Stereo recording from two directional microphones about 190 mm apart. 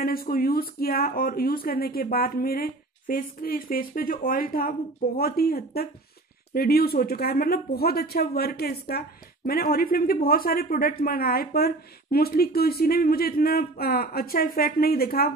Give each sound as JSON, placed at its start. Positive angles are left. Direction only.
{"t": 0.0, "sound": "speech", "side_deg": 50}